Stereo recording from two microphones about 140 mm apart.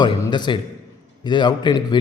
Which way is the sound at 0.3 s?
35° left (ahead or behind).